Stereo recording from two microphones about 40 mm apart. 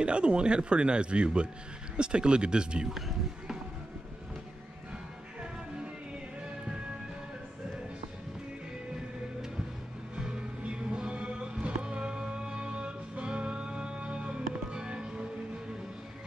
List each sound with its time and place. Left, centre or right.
0.0 s speech: right
2.9 s speech: centre
10.6 s music: right